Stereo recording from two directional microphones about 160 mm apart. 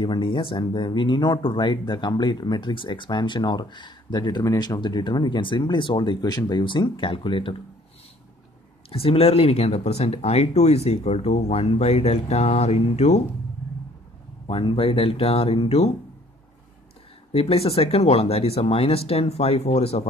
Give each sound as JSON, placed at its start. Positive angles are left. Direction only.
{"t": 0.0, "sound": "speech", "side_deg": 30}
{"t": 8.9, "sound": "speech", "side_deg": 35}
{"t": 14.5, "sound": "speech", "side_deg": 30}
{"t": 17.3, "sound": "speech", "side_deg": 40}